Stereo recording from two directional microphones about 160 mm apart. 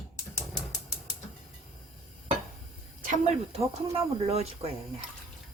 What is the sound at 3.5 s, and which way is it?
Speech, 40° right (ahead or behind).